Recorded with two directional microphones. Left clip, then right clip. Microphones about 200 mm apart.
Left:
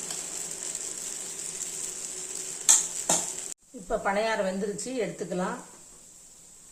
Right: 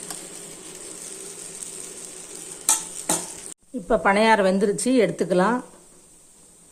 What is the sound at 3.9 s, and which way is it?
Speech, 40° right (ahead or behind).